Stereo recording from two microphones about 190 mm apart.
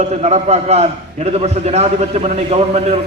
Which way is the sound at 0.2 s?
35° right (ahead or behind).